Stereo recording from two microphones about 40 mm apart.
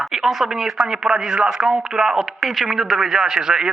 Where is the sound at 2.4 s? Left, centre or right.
Centre.